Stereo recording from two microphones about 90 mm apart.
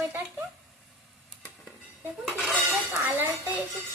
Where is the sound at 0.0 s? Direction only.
25° right (ahead or behind).